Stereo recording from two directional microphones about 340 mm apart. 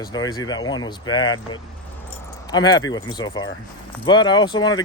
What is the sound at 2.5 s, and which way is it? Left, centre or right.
Speech, centre.